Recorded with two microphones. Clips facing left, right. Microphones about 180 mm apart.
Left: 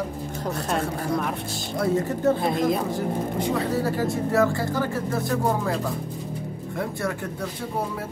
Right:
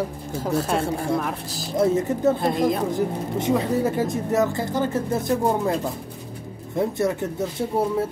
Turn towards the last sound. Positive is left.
turn(degrees=-20)  # may be behind; listen again after turning